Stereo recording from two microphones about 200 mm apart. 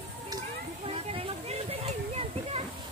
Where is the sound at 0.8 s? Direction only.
30° right (ahead or behind).